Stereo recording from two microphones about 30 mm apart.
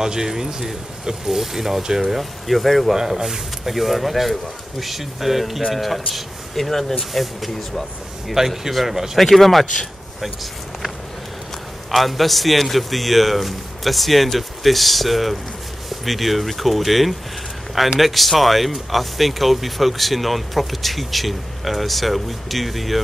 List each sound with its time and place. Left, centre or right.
0.0 s speech: centre
2.4 s speech: centre
3.0 s speech: centre
8.4 s speech: centre
9.2 s speech: centre
11.9 s speech: centre